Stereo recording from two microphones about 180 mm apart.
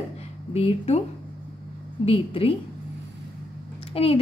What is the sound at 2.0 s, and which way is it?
Speech, 30° left (ahead or behind).